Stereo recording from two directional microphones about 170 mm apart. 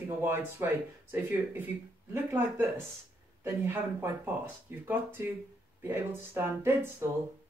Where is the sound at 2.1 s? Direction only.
10° right (ahead or behind).